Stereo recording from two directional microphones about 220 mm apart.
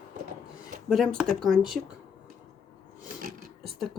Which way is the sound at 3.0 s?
40° right (ahead or behind).